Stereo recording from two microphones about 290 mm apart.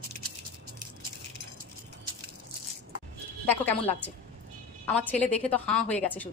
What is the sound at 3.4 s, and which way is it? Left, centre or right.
Speech, centre.